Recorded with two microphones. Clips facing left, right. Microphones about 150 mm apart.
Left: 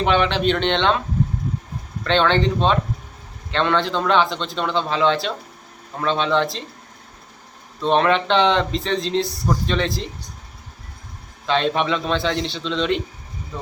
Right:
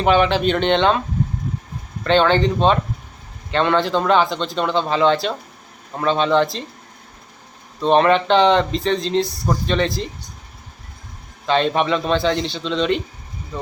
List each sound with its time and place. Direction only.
0.0 s a man's voice: 5° right (ahead or behind)
2.0 s a man's voice: 5° right (ahead or behind)
7.8 s a man's voice: centre (ahead or behind)
11.4 s a man's voice: centre (ahead or behind)